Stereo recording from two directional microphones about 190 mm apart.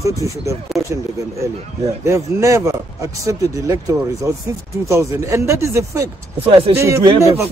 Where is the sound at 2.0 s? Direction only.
15° right (ahead or behind).